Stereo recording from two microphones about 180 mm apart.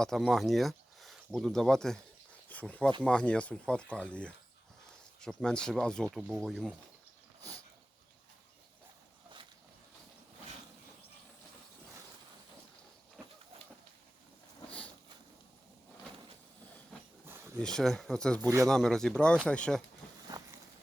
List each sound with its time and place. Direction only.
0.0 s speech: centre (ahead or behind)
17.6 s speech: 5° left (ahead or behind)
18.4 s speech: 15° right (ahead or behind)
18.7 s speech: 5° left (ahead or behind)